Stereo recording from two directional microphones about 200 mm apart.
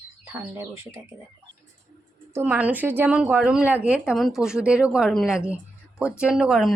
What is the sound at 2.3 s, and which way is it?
A woman's voice, 5° right (ahead or behind).